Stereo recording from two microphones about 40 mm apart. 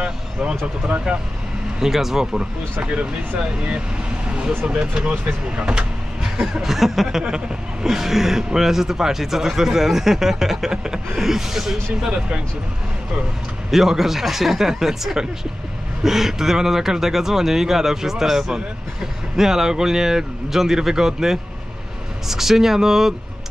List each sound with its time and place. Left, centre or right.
0.0 s vehicle: right
1.8 s speech: centre
3.5 s speech: right; by 11.8 s centre
12.0 s speech: right
13.7 s speech: centre